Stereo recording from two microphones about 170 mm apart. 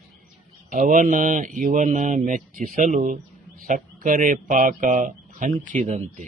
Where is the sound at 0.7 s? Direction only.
50° right (ahead or behind).